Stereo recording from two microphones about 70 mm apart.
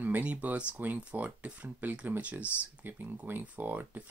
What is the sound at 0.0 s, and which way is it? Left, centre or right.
Speech, right.